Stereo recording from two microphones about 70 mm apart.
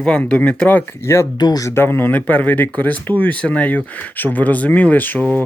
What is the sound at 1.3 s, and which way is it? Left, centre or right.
Speech, left.